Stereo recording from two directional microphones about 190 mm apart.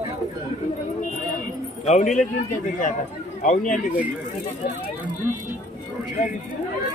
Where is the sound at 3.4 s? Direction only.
45° left (ahead or behind).